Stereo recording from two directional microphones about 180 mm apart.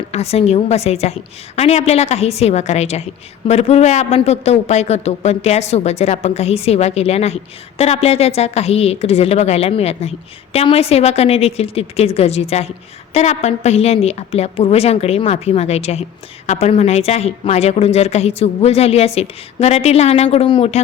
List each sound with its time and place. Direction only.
0.1 s speech: 35° left (ahead or behind)